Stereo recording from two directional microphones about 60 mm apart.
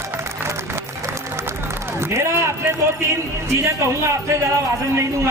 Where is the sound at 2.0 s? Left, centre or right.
Right.